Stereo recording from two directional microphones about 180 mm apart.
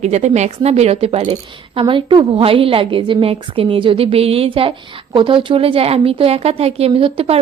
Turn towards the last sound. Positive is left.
turn(degrees=-30)  # may be behind; listen again after turning